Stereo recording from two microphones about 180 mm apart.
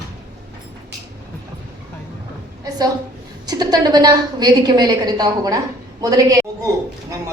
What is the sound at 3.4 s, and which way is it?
A woman's voice, 20° right (ahead or behind).